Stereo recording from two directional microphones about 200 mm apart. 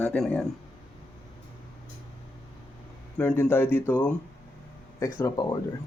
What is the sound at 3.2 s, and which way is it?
Speech, 10° left (ahead or behind).